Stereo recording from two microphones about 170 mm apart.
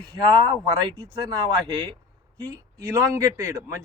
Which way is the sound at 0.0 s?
25° right (ahead or behind).